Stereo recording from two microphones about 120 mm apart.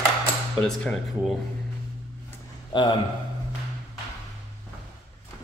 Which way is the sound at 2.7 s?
40° left (ahead or behind).